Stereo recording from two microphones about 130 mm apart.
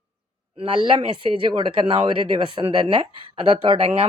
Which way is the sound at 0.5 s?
40° right (ahead or behind).